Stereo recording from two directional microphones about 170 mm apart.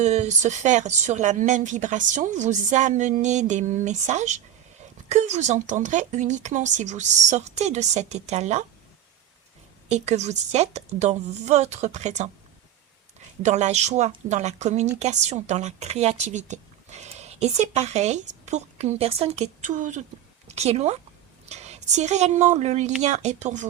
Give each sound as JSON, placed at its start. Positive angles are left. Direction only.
{"t": 0.0, "sound": "speech", "side_deg": -40}
{"t": 9.9, "sound": "speech", "side_deg": -40}
{"t": 13.4, "sound": "speech", "side_deg": -40}